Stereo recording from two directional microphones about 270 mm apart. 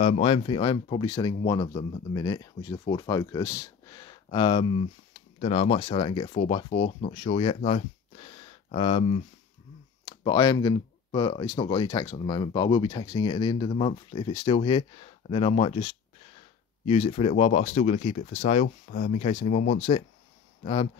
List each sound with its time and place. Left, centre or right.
0.0 s speech: left